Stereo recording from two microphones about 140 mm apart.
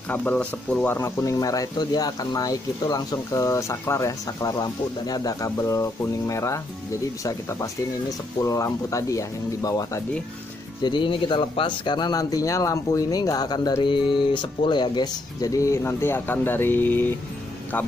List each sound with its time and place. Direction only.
0.1 s speech: 10° left (ahead or behind)
0.9 s speech: 20° left (ahead or behind)
8.5 s speech: 20° left (ahead or behind)
10.8 s speech: 35° left (ahead or behind); by 17.1 s 15° left (ahead or behind)